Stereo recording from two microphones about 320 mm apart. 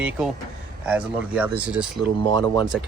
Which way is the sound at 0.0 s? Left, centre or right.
Centre.